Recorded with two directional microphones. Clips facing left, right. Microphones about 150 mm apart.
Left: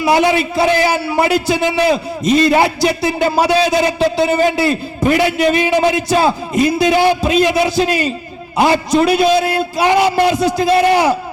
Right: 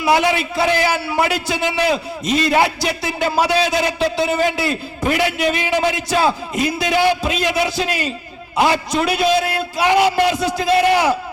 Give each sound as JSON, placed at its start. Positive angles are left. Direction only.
{"t": 0.0, "sound": "a man's voice", "side_deg": 35}